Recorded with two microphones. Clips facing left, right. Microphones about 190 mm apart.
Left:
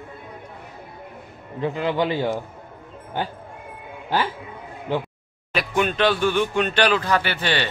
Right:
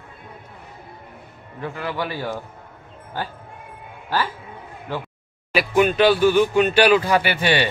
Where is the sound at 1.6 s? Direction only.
20° left (ahead or behind).